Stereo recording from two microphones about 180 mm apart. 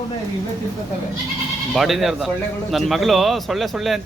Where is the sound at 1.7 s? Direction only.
Centre (ahead or behind).